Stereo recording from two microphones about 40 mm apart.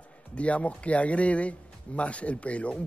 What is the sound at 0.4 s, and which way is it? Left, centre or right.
Speech, left.